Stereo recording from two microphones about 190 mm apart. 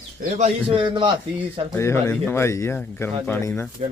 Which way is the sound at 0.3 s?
30° right (ahead or behind).